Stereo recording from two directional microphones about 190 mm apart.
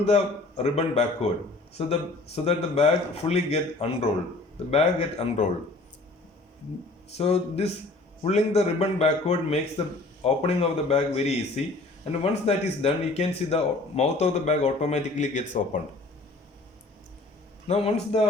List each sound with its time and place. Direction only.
0.0 s speech: 35° left (ahead or behind)
7.2 s speech: 35° left (ahead or behind)
17.7 s speech: 35° left (ahead or behind)